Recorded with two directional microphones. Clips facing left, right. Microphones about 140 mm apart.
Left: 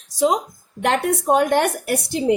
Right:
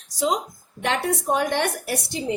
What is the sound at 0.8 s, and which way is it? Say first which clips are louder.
A woman's voice: left 4 dB; 60° left (ahead or behind).